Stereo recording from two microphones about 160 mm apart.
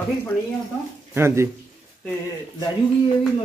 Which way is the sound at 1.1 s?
15° right (ahead or behind).